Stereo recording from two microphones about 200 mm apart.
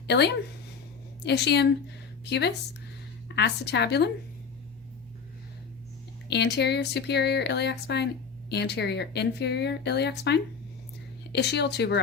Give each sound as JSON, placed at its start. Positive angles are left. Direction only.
{"t": 0.1, "sound": "speech", "side_deg": 55}
{"t": 3.3, "sound": "speech", "side_deg": 60}
{"t": 6.2, "sound": "speech", "side_deg": 55}